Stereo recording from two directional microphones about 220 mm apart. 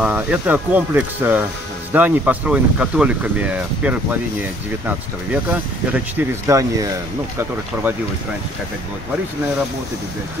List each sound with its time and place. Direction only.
0.0 s speech: 5° right (ahead or behind)